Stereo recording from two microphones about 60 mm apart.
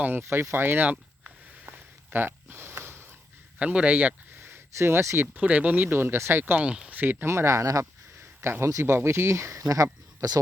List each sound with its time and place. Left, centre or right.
0.1 s speech: right
1.6 s a sound: right
3.6 s speech: right
4.4 s a sound: right
5.2 s speech: right
6.6 s speech: centre
7.0 s speech: right
7.3 s speech: right
8.2 s a sound: right
8.8 s speech: right